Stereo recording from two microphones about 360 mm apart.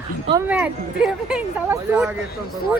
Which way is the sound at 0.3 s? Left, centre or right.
Centre.